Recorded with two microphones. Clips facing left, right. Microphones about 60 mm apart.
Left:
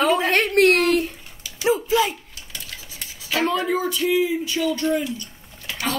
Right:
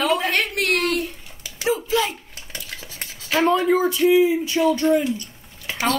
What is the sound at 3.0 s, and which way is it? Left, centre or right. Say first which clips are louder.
Speech: right 3 dB; right.